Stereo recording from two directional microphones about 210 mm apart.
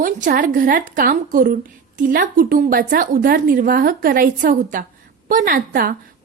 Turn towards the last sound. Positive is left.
turn(degrees=-40)  # may be behind; listen again after turning